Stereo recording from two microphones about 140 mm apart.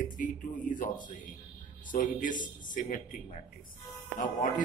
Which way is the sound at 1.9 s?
70° left (ahead or behind).